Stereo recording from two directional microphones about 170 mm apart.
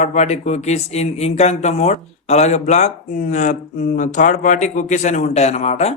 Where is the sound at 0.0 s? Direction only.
45° left (ahead or behind).